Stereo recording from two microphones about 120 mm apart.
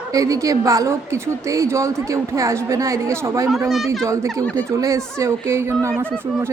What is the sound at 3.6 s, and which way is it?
Speech, centre (ahead or behind).